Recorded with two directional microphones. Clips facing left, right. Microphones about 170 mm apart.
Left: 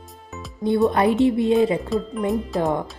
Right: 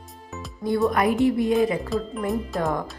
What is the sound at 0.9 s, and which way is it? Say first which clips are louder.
Speech: left 1 dB; 30° left (ahead or behind).